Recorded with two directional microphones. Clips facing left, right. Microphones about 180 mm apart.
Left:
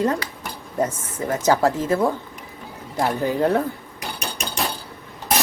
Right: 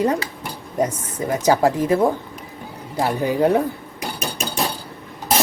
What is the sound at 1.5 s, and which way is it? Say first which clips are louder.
Cutlery: right 2 dB; 15° right (ahead or behind).